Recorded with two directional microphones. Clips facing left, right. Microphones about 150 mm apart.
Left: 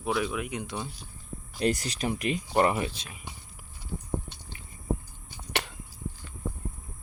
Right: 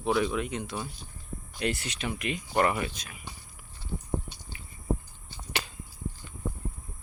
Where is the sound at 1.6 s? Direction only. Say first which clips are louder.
Left 4 dB; 40° left (ahead or behind).